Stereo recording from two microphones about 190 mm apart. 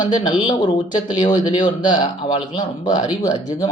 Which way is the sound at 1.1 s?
20° left (ahead or behind).